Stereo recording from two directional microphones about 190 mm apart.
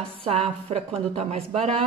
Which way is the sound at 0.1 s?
30° right (ahead or behind).